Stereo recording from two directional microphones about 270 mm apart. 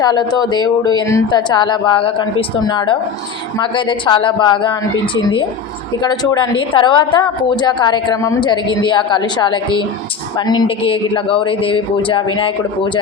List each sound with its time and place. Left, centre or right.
0.0 s a woman's voice: centre